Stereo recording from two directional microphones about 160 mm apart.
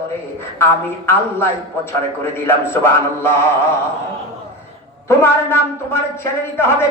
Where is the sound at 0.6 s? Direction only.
15° left (ahead or behind).